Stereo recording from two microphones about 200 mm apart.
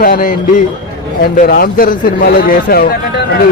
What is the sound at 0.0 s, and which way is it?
Speech, 45° left (ahead or behind).